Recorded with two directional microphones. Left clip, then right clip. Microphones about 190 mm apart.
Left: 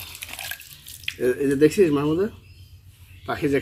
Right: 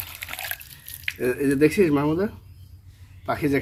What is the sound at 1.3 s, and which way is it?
Speech, 10° right (ahead or behind).